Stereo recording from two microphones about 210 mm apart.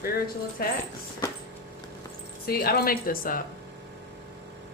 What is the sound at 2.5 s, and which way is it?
Speech, 45° left (ahead or behind).